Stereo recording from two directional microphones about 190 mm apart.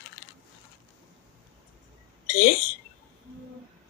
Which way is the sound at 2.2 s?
45° left (ahead or behind).